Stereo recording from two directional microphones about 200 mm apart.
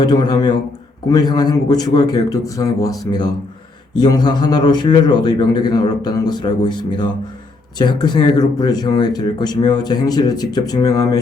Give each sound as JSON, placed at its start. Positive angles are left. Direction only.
{"t": 0.0, "sound": "speech", "side_deg": 20}